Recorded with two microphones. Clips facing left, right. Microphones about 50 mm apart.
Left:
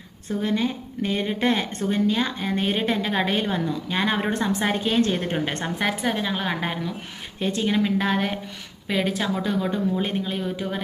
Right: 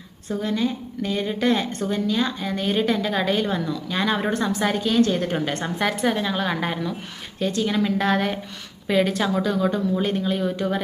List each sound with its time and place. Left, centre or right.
0.4 s speech: left
5.8 s a woman's voice: centre
7.3 s speech: left
7.9 s a woman's voice: centre
9.4 s a woman's voice: centre